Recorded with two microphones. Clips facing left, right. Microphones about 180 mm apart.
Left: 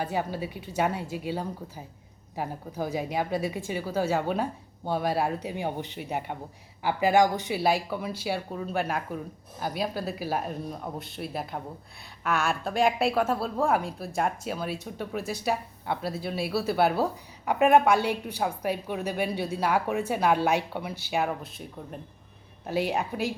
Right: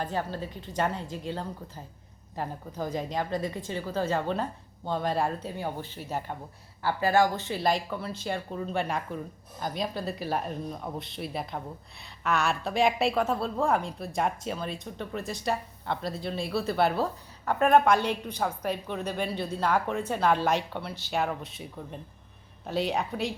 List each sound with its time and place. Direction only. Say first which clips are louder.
0.0 s speech: left 2 dB; 10° left (ahead or behind)